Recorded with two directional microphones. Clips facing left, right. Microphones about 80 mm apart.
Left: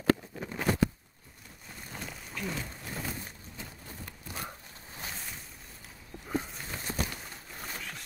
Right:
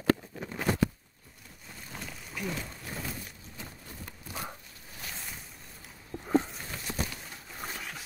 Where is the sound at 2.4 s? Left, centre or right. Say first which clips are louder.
Right 1 dB; centre.